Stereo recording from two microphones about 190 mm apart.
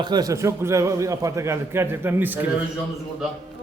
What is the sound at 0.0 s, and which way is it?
A man's voice, 20° right (ahead or behind).